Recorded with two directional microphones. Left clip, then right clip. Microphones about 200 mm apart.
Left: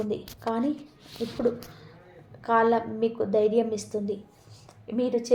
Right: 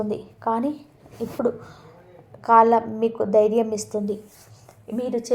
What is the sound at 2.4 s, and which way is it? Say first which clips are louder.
A woman's voice: right 7 dB; 25° right (ahead or behind).